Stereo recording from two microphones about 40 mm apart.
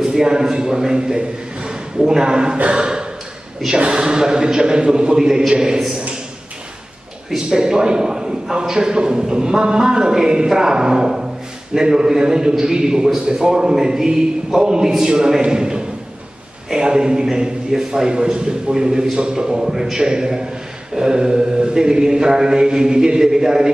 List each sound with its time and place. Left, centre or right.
0.0 s a man's voice: centre
7.2 s a man's voice: centre